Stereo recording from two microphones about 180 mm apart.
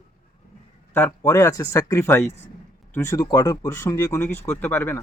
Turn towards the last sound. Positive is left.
turn(degrees=10)  # may be behind; listen again after turning